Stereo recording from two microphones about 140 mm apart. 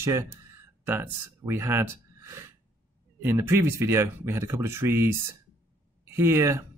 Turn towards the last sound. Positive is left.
turn(degrees=-20)  # may be behind; listen again after turning